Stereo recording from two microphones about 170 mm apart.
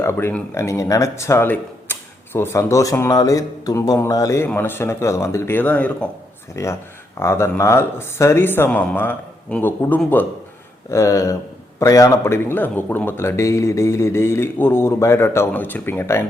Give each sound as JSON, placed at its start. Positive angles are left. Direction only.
{"t": 0.0, "sound": "speech", "side_deg": 15}